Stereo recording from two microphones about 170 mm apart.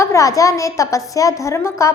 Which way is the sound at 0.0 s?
20° left (ahead or behind).